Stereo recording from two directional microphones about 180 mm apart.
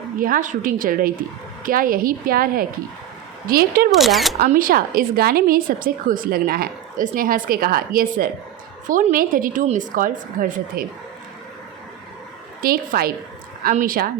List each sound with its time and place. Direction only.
0.2 s a woman's voice: 50° right (ahead or behind)
3.9 s speech: centre (ahead or behind)
4.4 s a woman's voice: 50° right (ahead or behind)
12.6 s a woman's voice: 55° right (ahead or behind)